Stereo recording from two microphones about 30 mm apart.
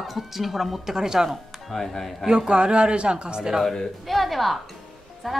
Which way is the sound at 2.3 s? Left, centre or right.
Right.